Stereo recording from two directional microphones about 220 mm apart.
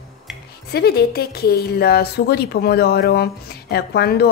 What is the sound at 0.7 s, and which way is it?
Speech, 45° left (ahead or behind).